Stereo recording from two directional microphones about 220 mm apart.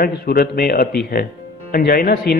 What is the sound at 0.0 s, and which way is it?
Speech, 45° left (ahead or behind).